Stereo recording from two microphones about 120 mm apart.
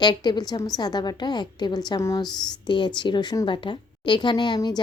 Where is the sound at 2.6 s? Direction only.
40° left (ahead or behind).